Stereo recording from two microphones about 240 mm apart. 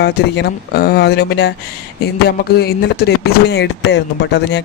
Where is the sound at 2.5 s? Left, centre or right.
Left.